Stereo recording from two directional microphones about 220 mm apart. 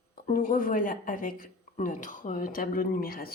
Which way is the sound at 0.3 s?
40° left (ahead or behind).